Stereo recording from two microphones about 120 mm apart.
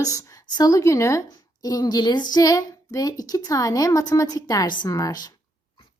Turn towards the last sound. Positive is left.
turn(degrees=35)  # may be behind; listen again after turning